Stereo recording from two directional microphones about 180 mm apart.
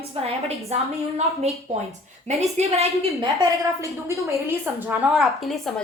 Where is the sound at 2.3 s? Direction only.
35° right (ahead or behind).